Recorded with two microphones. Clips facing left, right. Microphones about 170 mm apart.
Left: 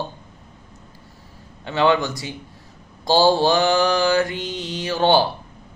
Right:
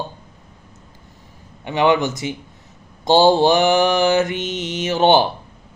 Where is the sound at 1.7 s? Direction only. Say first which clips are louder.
Right 2 dB; 20° right (ahead or behind).